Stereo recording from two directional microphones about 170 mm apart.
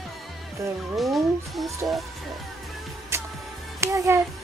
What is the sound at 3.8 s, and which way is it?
Speech, 15° right (ahead or behind).